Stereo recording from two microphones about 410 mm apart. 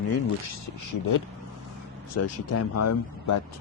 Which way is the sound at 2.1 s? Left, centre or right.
Left.